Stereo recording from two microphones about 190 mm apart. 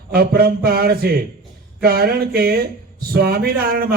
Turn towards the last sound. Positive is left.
turn(degrees=-50)  # may be behind; listen again after turning